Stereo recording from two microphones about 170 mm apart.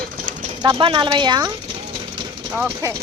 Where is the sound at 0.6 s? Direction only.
30° right (ahead or behind).